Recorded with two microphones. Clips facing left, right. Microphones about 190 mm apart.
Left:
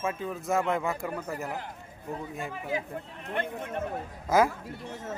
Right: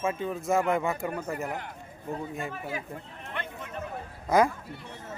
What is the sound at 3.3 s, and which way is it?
Speech, 50° left (ahead or behind).